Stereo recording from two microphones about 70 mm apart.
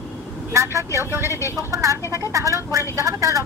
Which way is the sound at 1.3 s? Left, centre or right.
Left.